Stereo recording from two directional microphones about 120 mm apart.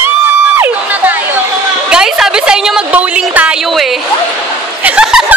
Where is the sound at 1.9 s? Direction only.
5° right (ahead or behind).